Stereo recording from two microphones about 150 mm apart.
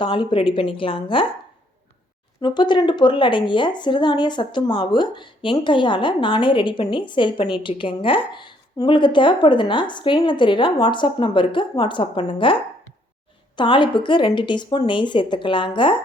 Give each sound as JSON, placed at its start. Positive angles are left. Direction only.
{"t": 0.0, "sound": "a woman's voice", "side_deg": 35}
{"t": 2.4, "sound": "a woman's voice", "side_deg": 30}
{"t": 13.6, "sound": "a woman's voice", "side_deg": 30}